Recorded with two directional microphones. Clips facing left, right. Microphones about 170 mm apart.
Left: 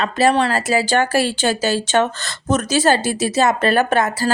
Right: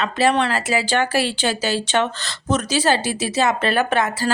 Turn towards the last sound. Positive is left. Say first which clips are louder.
# left 2 dB
turn(degrees=40)  # may be behind; listen again after turning